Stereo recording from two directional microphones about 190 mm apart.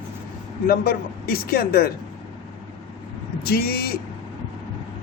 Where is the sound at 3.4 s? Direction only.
55° left (ahead or behind).